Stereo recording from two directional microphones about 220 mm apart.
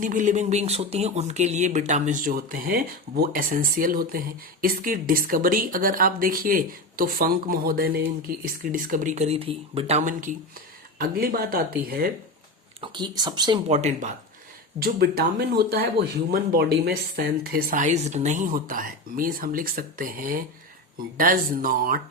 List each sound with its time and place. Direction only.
0.0 s speech: 35° right (ahead or behind)
12.8 s speech: 20° right (ahead or behind)
14.8 s speech: 45° right (ahead or behind)